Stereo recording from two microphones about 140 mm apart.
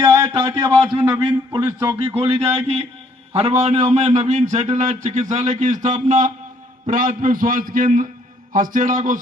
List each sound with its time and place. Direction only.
0.0 s a man's voice: 20° right (ahead or behind)
0.3 s a man's voice: 40° right (ahead or behind)
2.0 s a man's voice: 45° right (ahead or behind); by 9.1 s 70° right (ahead or behind)